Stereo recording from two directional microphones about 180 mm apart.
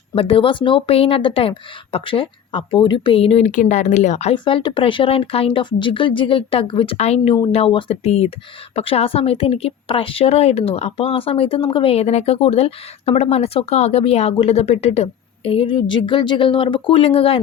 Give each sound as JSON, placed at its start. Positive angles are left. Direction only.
{"t": 0.1, "sound": "a woman's voice", "side_deg": 30}